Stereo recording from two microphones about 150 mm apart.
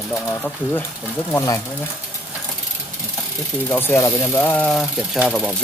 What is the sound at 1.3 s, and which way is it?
Speech, 20° left (ahead or behind).